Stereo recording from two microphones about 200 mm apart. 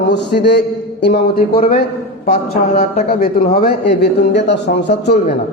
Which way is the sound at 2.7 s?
40° left (ahead or behind).